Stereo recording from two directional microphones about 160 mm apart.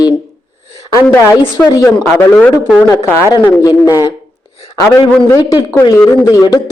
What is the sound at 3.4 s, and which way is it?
A man's voice, 20° left (ahead or behind).